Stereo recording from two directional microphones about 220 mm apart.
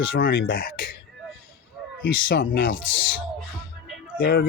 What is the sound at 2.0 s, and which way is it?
Speech, 50° left (ahead or behind).